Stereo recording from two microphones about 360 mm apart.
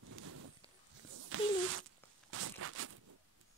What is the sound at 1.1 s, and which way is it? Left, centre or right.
Speech, right.